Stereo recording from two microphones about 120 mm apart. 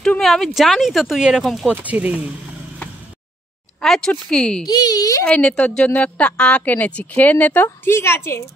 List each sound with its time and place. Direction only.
0.0 s speech: 5° left (ahead or behind)
1.7 s speech: 15° right (ahead or behind)
3.8 s a woman's voice: 5° left (ahead or behind)
4.6 s a woman's voice: 35° left (ahead or behind)
5.2 s a woman's voice: 5° left (ahead or behind)